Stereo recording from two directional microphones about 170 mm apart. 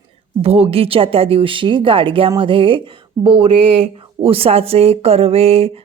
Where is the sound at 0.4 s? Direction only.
35° right (ahead or behind).